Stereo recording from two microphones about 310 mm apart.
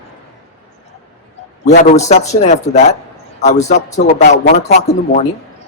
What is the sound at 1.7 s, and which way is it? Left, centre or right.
Speech, left.